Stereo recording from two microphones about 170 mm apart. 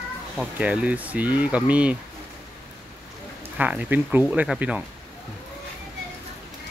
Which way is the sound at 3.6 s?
10° right (ahead or behind).